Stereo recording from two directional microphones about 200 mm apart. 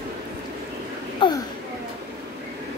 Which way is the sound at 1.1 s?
25° left (ahead or behind).